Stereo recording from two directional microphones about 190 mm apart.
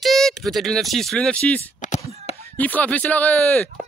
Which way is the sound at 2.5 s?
10° left (ahead or behind).